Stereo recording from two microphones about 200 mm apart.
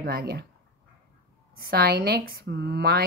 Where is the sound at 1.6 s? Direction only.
50° right (ahead or behind).